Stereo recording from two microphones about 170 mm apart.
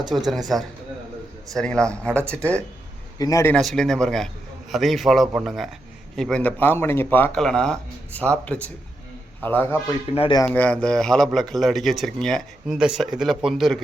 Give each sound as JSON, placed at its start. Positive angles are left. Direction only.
{"t": 0.1, "sound": "speech", "side_deg": 0}
{"t": 1.5, "sound": "speech", "side_deg": 5}
{"t": 3.2, "sound": "speech", "side_deg": 20}
{"t": 3.5, "sound": "speech", "side_deg": 5}
{"t": 10.2, "sound": "speech", "side_deg": 30}
{"t": 10.4, "sound": "speech", "side_deg": 10}